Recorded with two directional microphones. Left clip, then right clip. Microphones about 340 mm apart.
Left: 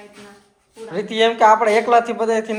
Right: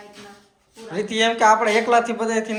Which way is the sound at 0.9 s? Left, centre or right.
Centre.